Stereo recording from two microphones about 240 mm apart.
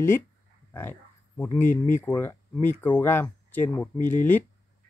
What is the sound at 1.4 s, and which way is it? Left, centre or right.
Speech, centre.